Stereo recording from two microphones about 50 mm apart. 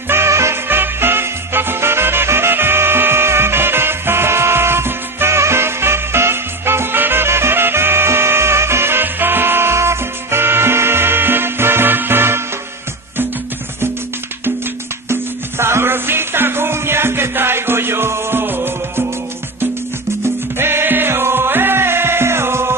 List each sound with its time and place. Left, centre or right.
0.1 s music: right
0.7 s music: right
15.0 s music: right
20.5 s music: right